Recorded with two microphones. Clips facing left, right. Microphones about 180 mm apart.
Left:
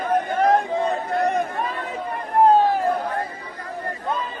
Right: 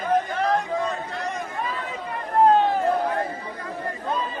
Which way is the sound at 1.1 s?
60° left (ahead or behind).